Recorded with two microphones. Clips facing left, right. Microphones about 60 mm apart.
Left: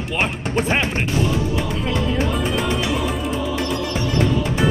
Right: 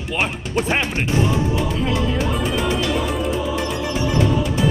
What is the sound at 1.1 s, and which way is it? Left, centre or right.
Music, right.